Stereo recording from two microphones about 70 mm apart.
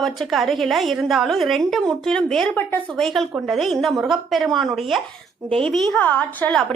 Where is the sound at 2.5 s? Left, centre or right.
Left.